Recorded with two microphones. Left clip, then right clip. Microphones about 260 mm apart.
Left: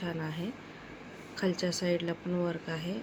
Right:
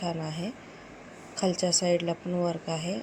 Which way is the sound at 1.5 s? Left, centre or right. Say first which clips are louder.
Right 6 dB; right.